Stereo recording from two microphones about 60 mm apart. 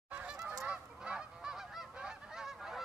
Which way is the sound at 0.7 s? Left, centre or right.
Centre.